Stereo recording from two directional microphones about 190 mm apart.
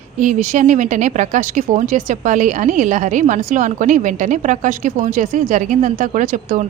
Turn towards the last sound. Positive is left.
turn(degrees=-40)  # may be behind; listen again after turning